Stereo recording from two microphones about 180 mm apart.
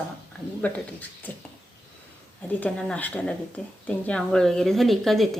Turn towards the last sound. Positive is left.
turn(degrees=0)  # may be behind; listen again after turning